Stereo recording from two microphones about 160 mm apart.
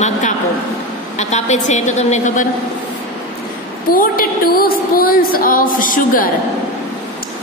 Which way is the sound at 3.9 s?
65° left (ahead or behind).